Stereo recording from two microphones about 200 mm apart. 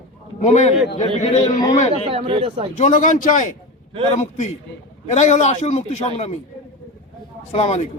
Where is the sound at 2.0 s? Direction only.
30° right (ahead or behind).